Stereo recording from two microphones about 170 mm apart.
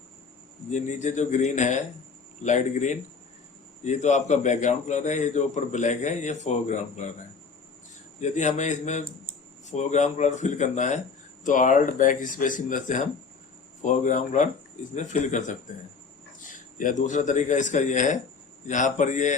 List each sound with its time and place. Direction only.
0.7 s a man's voice: 45° left (ahead or behind)
8.2 s a man's voice: 45° left (ahead or behind)